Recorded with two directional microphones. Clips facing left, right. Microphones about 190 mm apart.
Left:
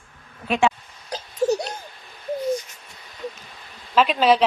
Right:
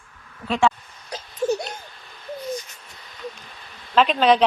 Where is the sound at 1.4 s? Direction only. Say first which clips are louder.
Left 2 dB; 30° left (ahead or behind).